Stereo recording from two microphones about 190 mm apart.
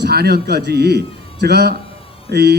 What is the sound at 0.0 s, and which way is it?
A man's voice, 55° right (ahead or behind).